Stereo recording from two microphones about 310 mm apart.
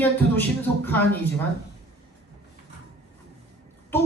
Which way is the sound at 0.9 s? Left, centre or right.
Centre.